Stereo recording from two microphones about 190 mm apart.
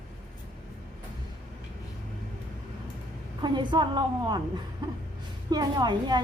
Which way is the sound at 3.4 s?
25° right (ahead or behind).